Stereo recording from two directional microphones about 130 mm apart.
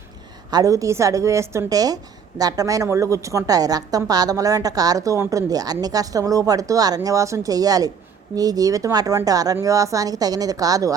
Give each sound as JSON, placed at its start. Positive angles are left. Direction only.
{"t": 0.5, "sound": "a woman's voice", "side_deg": -25}